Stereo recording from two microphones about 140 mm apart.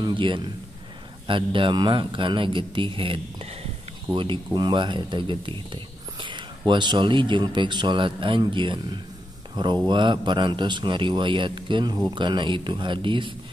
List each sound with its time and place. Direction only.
0.0 s a man's voice: 35° right (ahead or behind)
9.8 s speech: 35° right (ahead or behind)